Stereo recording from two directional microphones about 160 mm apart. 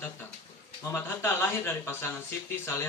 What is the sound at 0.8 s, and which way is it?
Speech, 15° left (ahead or behind).